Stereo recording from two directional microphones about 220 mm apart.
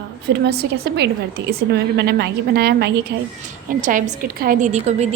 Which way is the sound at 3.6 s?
35° right (ahead or behind).